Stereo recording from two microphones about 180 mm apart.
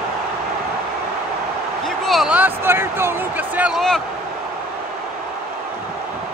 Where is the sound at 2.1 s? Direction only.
5° right (ahead or behind).